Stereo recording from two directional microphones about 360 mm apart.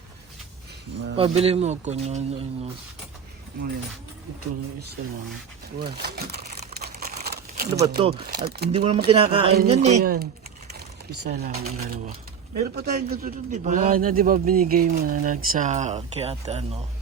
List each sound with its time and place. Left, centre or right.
1.1 s speech: centre
5.8 s crumpling: right
7.8 s speech: centre
8.4 s a man's voice: right
11.3 s a man's voice: right